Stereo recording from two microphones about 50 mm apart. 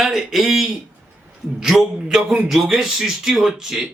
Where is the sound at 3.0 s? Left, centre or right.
Centre.